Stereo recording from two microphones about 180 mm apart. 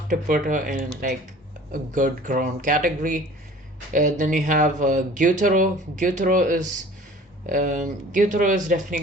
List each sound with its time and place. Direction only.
0.1 s speech: 45° right (ahead or behind)